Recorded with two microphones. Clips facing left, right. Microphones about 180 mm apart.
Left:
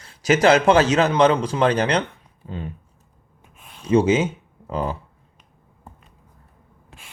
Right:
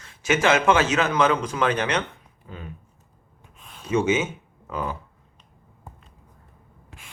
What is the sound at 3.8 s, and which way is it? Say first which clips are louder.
Speech: left 5 dB; 35° left (ahead or behind).